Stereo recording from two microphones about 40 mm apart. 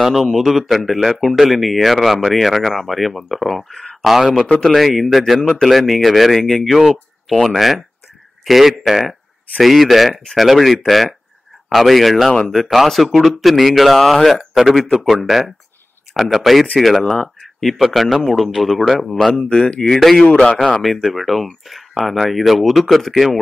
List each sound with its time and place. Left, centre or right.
0.0 s speech: centre
4.0 s speech: centre
14.5 s speech: centre
19.3 s speech: left
19.8 s speech: centre